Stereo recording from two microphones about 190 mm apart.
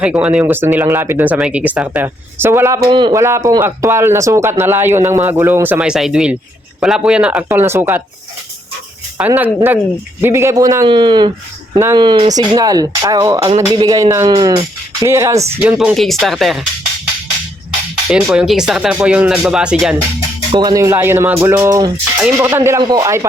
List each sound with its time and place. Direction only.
0.0 s speech: 5° right (ahead or behind)
9.1 s speech: 10° right (ahead or behind)
18.1 s speech: 5° right (ahead or behind)
20.5 s speech: 20° right (ahead or behind)